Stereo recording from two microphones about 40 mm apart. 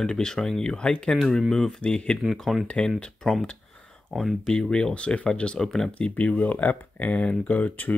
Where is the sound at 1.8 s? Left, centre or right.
Left.